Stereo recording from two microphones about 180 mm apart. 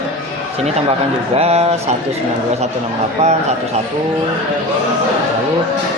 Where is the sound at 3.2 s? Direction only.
40° right (ahead or behind).